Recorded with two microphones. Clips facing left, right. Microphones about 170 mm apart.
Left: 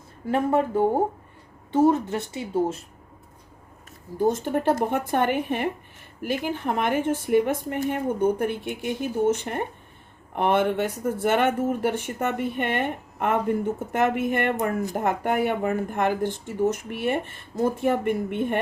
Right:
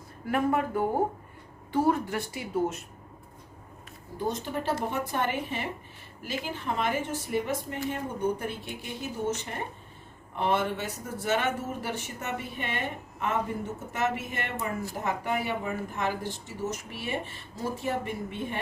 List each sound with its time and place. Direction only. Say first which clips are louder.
0.3 s speech: left 4 dB; 30° left (ahead or behind)
4.3 s speech: left 7 dB; 50° left (ahead or behind)